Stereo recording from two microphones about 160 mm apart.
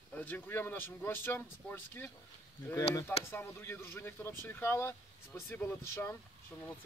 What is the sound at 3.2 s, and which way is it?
Speech, 15° left (ahead or behind).